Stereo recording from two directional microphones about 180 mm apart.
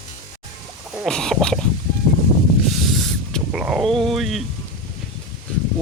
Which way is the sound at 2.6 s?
Centre (ahead or behind).